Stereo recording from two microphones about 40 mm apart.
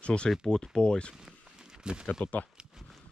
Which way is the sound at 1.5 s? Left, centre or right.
Centre.